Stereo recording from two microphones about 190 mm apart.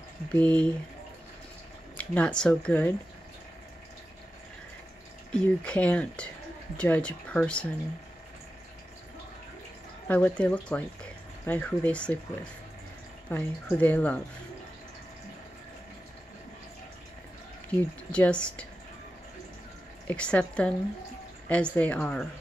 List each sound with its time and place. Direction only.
0.3 s speech: 5° left (ahead or behind)
2.0 s speech: 5° left (ahead or behind)
5.3 s speech: 5° left (ahead or behind)
10.0 s speech: 5° left (ahead or behind)
13.3 s speech: 10° left (ahead or behind)
17.7 s speech: 5° left (ahead or behind)
20.1 s speech: 5° left (ahead or behind)